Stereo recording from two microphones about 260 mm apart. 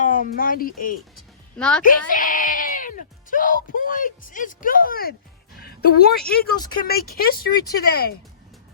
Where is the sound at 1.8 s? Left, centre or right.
Left.